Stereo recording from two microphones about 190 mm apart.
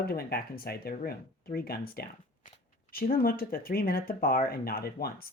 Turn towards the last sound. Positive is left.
turn(degrees=55)  # may be behind; listen again after turning